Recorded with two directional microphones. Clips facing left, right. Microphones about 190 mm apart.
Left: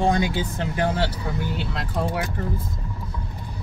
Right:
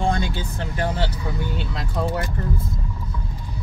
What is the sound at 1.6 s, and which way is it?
Speech, centre (ahead or behind).